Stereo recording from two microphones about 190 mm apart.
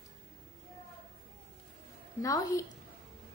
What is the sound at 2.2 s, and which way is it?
Speech, 15° left (ahead or behind).